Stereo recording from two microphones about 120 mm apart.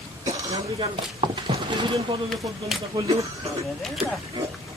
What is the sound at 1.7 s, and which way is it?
Speech, 40° right (ahead or behind).